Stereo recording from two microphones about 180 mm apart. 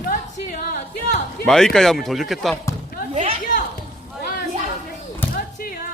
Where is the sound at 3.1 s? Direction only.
40° right (ahead or behind).